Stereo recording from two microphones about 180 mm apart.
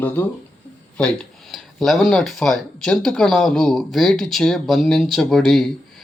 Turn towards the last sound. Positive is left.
turn(degrees=0)  # may be behind; listen again after turning